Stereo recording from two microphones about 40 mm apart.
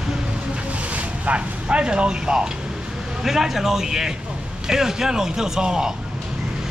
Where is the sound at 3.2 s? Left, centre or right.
Centre.